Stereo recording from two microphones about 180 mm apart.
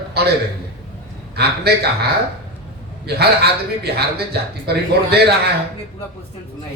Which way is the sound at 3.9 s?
65° right (ahead or behind).